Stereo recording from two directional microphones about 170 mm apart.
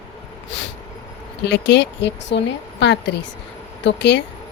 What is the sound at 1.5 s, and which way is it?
Speech, 90° left.